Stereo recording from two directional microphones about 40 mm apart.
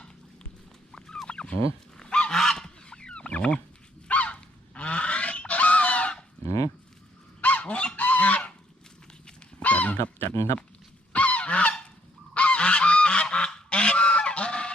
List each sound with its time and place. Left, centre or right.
0.9 s fowl: centre
2.0 s goose: left
2.3 s goose: centre
2.9 s fowl: left
4.1 s goose: left
7.4 s goose: left
7.9 s fowl: left
9.6 s a sound: left
11.1 s goose: left